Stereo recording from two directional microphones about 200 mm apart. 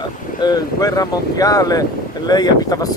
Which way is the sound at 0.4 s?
20° left (ahead or behind).